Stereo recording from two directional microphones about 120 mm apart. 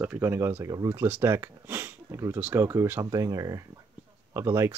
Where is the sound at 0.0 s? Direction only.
15° right (ahead or behind).